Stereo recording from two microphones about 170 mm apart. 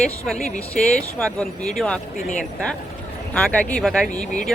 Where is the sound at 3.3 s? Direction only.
5° left (ahead or behind).